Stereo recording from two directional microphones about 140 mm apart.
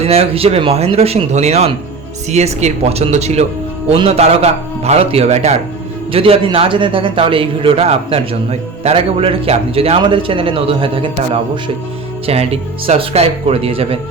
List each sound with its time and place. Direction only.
0.0 s a man's voice: 45° right (ahead or behind)
12.2 s speech: 45° right (ahead or behind)